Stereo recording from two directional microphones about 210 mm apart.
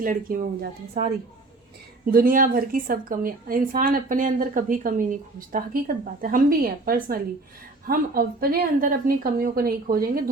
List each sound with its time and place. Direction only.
0.0 s a woman's voice: 40° right (ahead or behind)
2.1 s a woman's voice: 40° right (ahead or behind)